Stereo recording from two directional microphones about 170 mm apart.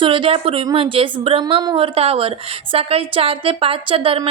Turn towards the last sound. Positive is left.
turn(degrees=-35)  # may be behind; listen again after turning